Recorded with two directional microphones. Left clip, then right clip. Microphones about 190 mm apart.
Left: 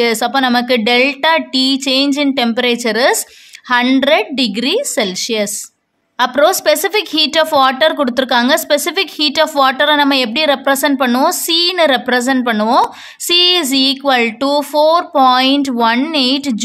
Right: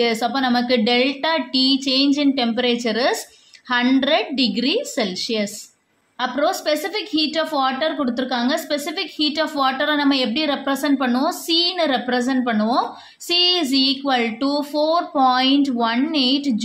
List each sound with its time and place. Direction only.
0.0 s a woman's voice: 40° left (ahead or behind)